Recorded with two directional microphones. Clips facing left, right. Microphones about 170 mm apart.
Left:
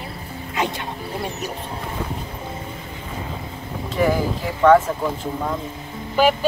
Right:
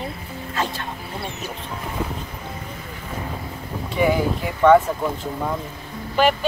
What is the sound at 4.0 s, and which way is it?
Speech, centre (ahead or behind).